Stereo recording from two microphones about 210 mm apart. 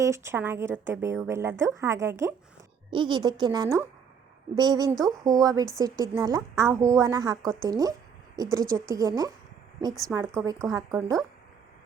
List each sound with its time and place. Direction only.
0.0 s a woman's voice: 15° right (ahead or behind)